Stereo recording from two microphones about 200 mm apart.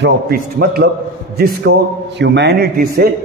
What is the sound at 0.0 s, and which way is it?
A man's voice, 50° right (ahead or behind).